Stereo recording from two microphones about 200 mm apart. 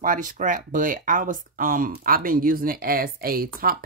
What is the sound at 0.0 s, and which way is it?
Speech, 40° right (ahead or behind).